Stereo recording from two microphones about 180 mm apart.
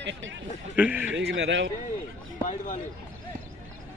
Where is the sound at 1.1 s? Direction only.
75° right (ahead or behind).